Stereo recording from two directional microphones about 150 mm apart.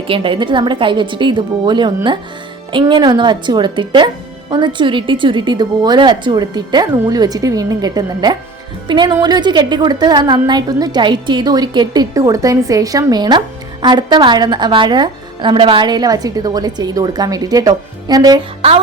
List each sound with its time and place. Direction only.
0.1 s a woman's voice: 35° right (ahead or behind)